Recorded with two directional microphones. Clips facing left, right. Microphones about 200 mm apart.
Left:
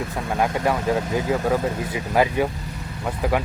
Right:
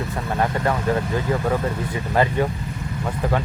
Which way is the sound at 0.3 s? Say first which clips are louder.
Left 1 dB; 10° left (ahead or behind).